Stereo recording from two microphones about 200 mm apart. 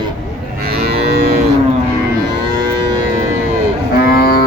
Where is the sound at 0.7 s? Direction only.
50° right (ahead or behind).